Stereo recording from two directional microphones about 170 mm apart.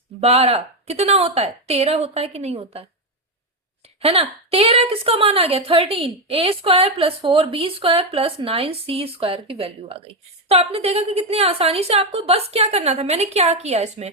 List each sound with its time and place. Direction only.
0.2 s a woman's voice: 35° right (ahead or behind)
4.0 s a woman's voice: 35° right (ahead or behind)